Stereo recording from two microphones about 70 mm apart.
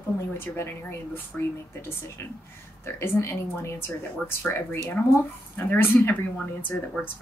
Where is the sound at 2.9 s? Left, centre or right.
Left.